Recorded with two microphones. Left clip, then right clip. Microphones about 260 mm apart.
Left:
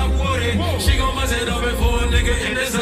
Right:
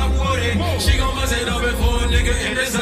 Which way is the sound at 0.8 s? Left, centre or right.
Left.